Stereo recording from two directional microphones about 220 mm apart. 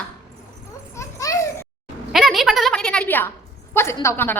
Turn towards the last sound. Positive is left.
turn(degrees=10)  # may be behind; listen again after turning